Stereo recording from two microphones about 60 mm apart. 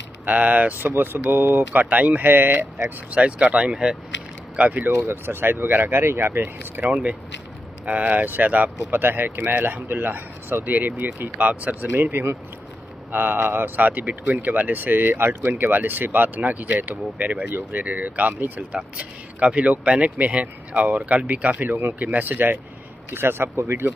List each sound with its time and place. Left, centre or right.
0.2 s speech: right
3.1 s speech: right
5.0 s speech: right
6.9 s speech: centre; by 11.4 s right
11.4 s speech: right
11.9 s speech: right
17.5 s speech: right
17.8 s speech: right
21.7 s speech: right